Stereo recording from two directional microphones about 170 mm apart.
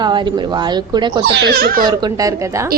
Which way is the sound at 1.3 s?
70° right (ahead or behind).